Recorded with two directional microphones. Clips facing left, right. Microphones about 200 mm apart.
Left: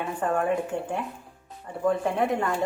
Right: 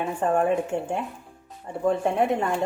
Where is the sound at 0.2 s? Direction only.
25° right (ahead or behind).